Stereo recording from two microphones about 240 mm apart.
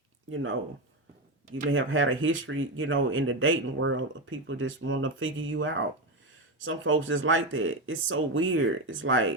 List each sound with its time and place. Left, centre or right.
0.3 s speech: right
1.7 s speech: right